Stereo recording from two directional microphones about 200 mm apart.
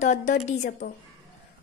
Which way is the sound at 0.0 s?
35° left (ahead or behind).